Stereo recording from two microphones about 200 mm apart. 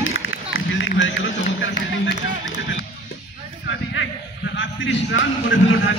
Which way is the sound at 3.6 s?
65° left (ahead or behind).